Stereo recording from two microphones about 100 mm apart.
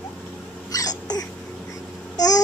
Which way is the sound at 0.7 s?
40° left (ahead or behind).